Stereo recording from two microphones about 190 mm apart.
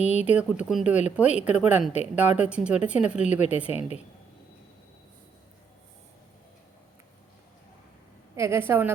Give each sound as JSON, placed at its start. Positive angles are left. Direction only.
{"t": 0.0, "sound": "speech", "side_deg": 35}
{"t": 0.3, "sound": "speech", "side_deg": -5}
{"t": 3.7, "sound": "speech", "side_deg": 35}
{"t": 8.4, "sound": "a woman's voice", "side_deg": -15}